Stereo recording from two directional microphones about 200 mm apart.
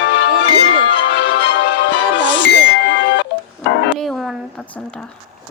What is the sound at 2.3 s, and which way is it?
Music, 65° left (ahead or behind).